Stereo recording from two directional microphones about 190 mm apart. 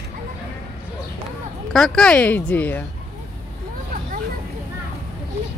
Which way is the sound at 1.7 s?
5° left (ahead or behind).